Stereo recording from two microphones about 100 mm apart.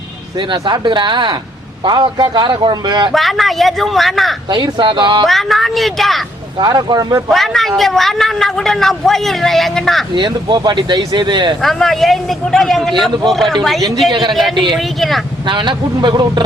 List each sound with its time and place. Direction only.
0.3 s speech: 50° right (ahead or behind)
3.1 s speech: centre (ahead or behind)
4.4 s speech: 50° right (ahead or behind)
5.2 s speech: centre (ahead or behind)
6.6 s speech: 45° right (ahead or behind)
7.3 s speech: centre (ahead or behind)
10.2 s speech: 50° right (ahead or behind)
11.6 s speech: 5° left (ahead or behind)
14.1 s speech: 50° right (ahead or behind)
14.7 s speech: centre (ahead or behind)
15.4 s speech: 50° right (ahead or behind)